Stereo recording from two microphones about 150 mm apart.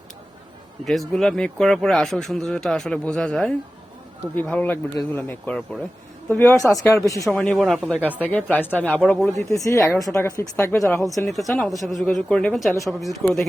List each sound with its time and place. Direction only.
0.9 s a woman's voice: centre (ahead or behind); by 7.3 s 20° left (ahead or behind)
7.3 s speech: centre (ahead or behind)
7.9 s speech: 10° right (ahead or behind)
8.2 s a woman's voice: 10° left (ahead or behind)
11.3 s speech: centre (ahead or behind)